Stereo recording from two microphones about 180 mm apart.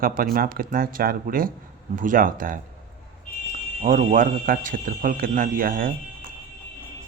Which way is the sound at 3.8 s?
45° right (ahead or behind).